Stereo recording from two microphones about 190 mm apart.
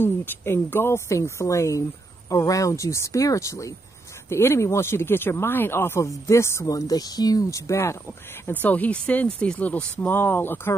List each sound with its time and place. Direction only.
0.0 s speech: 10° left (ahead or behind)